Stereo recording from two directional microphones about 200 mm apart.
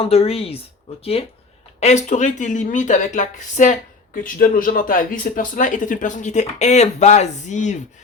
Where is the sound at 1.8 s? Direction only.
35° left (ahead or behind).